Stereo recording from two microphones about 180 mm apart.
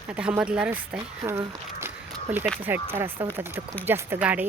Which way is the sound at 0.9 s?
20° right (ahead or behind).